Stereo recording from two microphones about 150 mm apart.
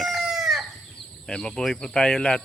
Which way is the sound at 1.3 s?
5° left (ahead or behind).